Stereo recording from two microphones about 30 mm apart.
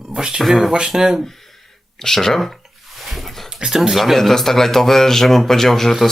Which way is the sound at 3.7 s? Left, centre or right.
Centre.